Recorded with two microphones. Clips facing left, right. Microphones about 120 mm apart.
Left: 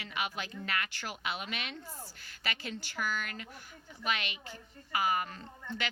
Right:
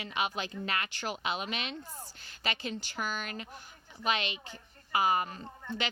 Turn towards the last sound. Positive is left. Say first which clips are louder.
# right 2 dB
turn(degrees=-25)  # may be behind; listen again after turning